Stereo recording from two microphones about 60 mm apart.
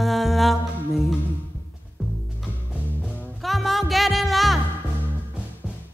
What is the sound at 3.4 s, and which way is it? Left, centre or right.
Music, centre.